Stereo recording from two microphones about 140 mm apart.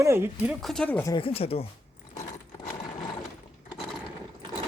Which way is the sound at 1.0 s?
35° left (ahead or behind).